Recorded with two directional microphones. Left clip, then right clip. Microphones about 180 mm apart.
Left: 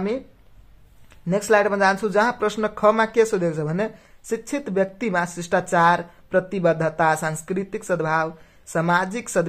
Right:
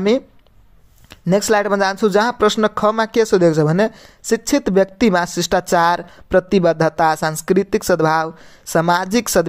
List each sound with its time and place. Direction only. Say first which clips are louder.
1.3 s speech: right 3 dB; 40° right (ahead or behind)